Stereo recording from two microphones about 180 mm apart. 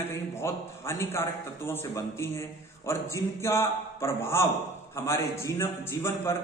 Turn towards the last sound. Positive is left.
turn(degrees=15)  # may be behind; listen again after turning